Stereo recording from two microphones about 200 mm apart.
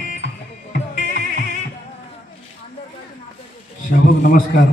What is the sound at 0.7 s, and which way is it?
Music, 40° left (ahead or behind).